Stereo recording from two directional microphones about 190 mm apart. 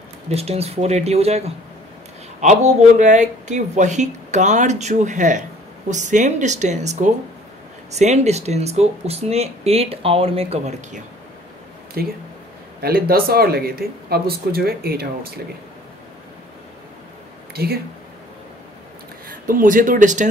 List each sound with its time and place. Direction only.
0.3 s speech: 30° right (ahead or behind)
12.0 s speech: 55° right (ahead or behind)
19.2 s speech: 45° right (ahead or behind)